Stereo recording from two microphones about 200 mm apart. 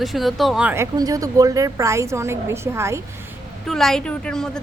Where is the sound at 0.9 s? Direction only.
20° right (ahead or behind).